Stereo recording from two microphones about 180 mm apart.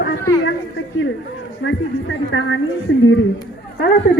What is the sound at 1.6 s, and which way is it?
Speech, 90° left.